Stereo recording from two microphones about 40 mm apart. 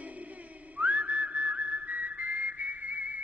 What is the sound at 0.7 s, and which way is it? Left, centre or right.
Whistle, right.